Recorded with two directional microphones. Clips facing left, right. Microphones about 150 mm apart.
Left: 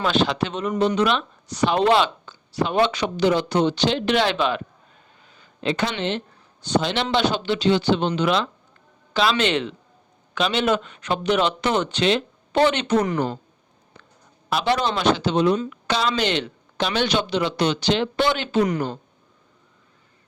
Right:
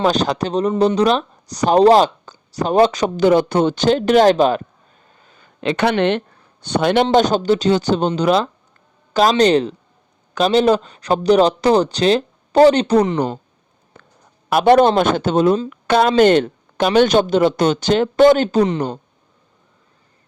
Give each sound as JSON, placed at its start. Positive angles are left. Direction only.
{"t": 0.0, "sound": "speech", "side_deg": -40}
{"t": 5.2, "sound": "a sound", "side_deg": -45}
{"t": 5.5, "sound": "speech", "side_deg": -65}
{"t": 13.1, "sound": "speech", "side_deg": -20}
{"t": 14.0, "sound": "a sound", "side_deg": -50}
{"t": 14.5, "sound": "speech", "side_deg": -50}